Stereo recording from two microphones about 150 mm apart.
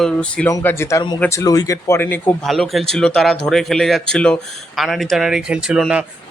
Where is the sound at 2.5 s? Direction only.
Centre (ahead or behind).